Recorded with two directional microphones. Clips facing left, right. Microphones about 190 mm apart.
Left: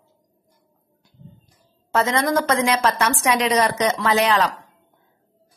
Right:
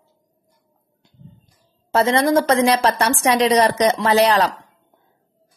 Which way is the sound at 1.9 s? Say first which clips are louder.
Right 4 dB; 30° right (ahead or behind).